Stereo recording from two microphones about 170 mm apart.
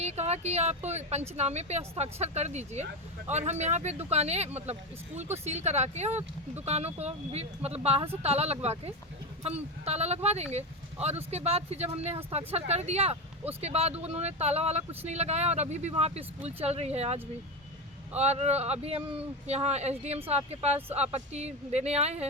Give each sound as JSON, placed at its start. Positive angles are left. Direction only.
{"t": 0.0, "sound": "speech", "side_deg": -40}
{"t": 18.2, "sound": "speech", "side_deg": -40}